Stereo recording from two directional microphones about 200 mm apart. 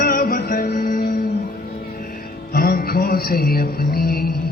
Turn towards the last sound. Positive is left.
turn(degrees=50)  # may be behind; listen again after turning